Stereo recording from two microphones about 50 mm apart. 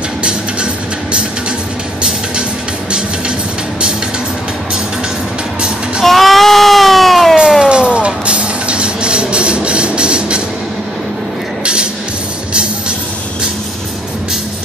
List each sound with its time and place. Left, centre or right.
0.2 s music: centre
6.0 s baby cry: centre
7.6 s music: centre
11.6 s music: centre